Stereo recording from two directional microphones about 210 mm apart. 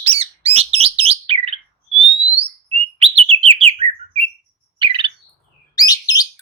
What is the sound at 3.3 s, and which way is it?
Bird, 25° right (ahead or behind).